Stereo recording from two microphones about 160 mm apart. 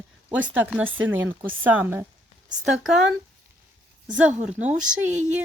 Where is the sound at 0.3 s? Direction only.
10° right (ahead or behind).